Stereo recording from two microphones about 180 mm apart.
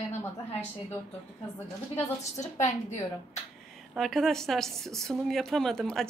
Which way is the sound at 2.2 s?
40° left (ahead or behind).